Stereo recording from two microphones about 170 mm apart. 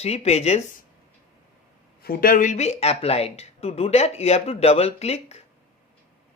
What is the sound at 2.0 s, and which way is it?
Speech, 60° left (ahead or behind).